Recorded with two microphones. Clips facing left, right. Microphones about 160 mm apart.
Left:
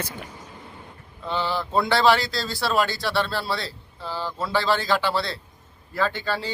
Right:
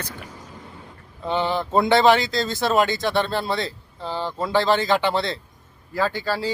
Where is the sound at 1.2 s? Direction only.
20° right (ahead or behind).